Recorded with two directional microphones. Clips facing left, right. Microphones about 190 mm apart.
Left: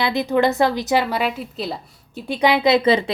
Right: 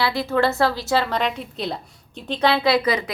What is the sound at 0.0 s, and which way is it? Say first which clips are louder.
A woman's voice: left 2 dB; 20° left (ahead or behind).